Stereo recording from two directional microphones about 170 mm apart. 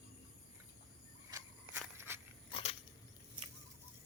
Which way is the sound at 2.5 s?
35° left (ahead or behind).